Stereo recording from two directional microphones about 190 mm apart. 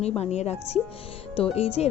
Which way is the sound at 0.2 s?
35° left (ahead or behind).